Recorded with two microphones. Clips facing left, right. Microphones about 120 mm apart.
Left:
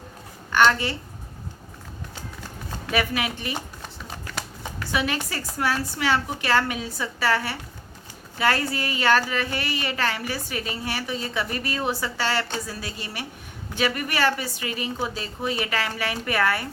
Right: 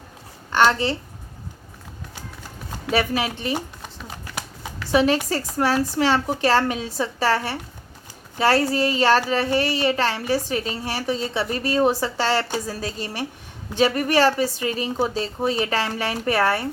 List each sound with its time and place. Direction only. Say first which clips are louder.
0.5 s a child's voice: right 2 dB; 30° right (ahead or behind)
2.9 s a child's voice: right 3 dB; 30° right (ahead or behind)
4.9 s a child's voice: right 8 dB; 35° right (ahead or behind)